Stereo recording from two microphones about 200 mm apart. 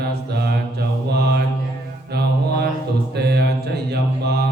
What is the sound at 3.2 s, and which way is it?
Mantra, 55° right (ahead or behind).